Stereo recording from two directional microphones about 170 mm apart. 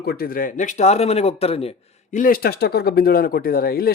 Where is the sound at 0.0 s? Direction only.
70° left (ahead or behind).